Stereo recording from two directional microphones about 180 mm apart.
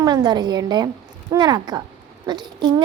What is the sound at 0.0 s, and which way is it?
A woman's voice, 25° right (ahead or behind).